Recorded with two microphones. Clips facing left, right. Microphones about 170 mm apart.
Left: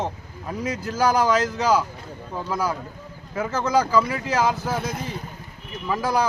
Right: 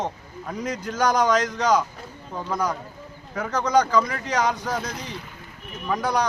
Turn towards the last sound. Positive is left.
turn(degrees=5)  # may be behind; listen again after turning